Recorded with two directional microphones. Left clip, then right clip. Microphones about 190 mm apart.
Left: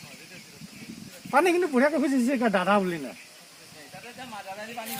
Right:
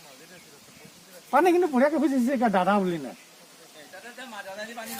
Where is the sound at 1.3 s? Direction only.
55° right (ahead or behind).